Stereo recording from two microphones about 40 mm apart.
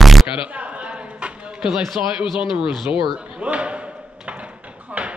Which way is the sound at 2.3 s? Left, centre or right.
Right.